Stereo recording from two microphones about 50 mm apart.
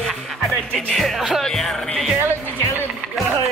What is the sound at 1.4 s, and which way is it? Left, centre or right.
Speech, centre.